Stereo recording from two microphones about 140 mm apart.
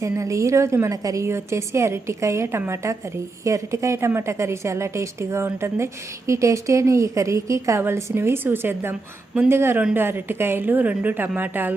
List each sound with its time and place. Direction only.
0.0 s a woman's voice: 20° right (ahead or behind)